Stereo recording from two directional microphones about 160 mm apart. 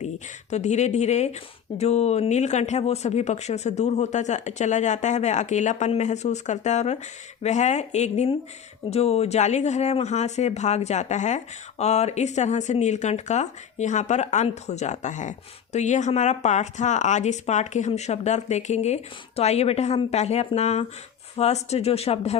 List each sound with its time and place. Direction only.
0.5 s speech: 45° left (ahead or behind)